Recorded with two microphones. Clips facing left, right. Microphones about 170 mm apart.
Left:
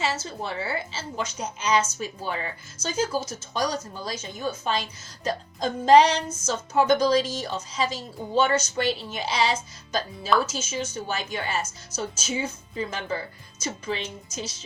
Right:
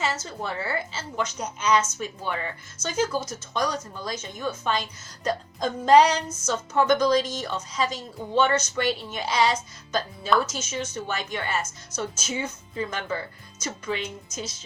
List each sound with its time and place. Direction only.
0.0 s speech: 30° left (ahead or behind)
13.6 s speech: 30° left (ahead or behind)